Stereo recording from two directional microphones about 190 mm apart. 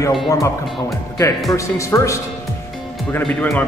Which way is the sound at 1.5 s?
15° left (ahead or behind).